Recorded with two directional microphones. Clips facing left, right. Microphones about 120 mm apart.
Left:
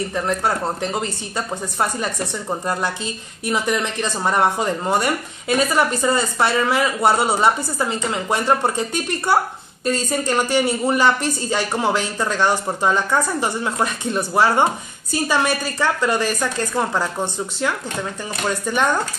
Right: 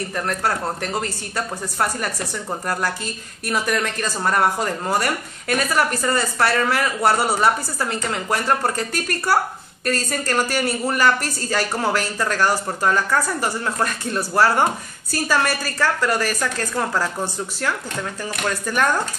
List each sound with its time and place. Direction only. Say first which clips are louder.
0.1 s a woman's voice: even; 15° left (ahead or behind)